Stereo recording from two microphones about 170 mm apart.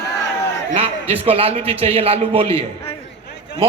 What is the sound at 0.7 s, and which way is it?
A man's voice, 35° right (ahead or behind).